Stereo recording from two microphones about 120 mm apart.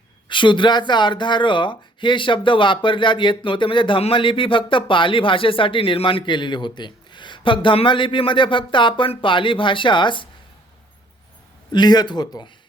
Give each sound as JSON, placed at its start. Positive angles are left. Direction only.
{"t": 0.3, "sound": "speech", "side_deg": 40}
{"t": 11.7, "sound": "speech", "side_deg": 35}